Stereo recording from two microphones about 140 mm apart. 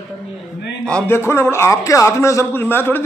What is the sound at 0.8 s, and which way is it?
A man's voice, 10° left (ahead or behind).